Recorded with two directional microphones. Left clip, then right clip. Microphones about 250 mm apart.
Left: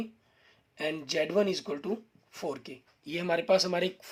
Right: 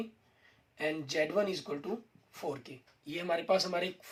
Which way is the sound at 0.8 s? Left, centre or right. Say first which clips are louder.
Left 2 dB; left.